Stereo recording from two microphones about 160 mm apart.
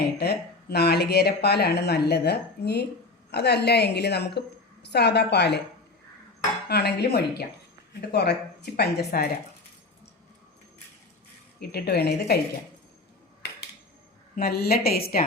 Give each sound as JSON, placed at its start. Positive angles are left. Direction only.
{"t": 0.2, "sound": "speech", "side_deg": 90}
{"t": 6.7, "sound": "speech", "side_deg": 90}
{"t": 11.7, "sound": "a woman's voice", "side_deg": 85}
{"t": 14.3, "sound": "a woman's voice", "side_deg": 70}